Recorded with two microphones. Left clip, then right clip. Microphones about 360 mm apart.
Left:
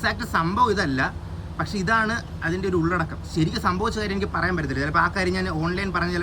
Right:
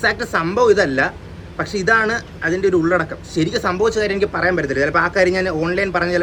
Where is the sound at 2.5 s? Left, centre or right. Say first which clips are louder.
Right 9 dB; right.